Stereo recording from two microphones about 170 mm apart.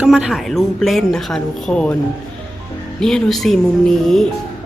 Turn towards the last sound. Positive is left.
turn(degrees=0)  # may be behind; listen again after turning